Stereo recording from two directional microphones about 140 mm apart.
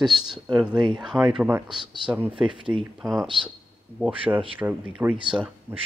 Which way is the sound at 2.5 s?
35° right (ahead or behind).